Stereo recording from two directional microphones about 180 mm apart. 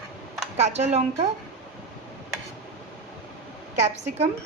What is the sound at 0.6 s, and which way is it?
Speech, 40° right (ahead or behind).